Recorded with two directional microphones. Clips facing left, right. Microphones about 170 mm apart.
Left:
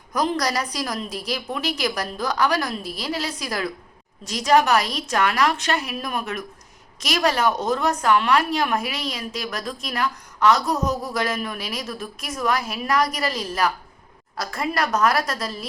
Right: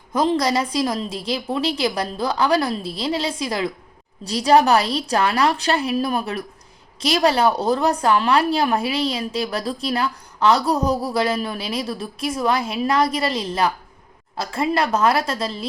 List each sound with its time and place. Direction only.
0.1 s a woman's voice: 25° right (ahead or behind)